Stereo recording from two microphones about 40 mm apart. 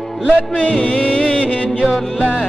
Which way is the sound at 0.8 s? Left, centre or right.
Left.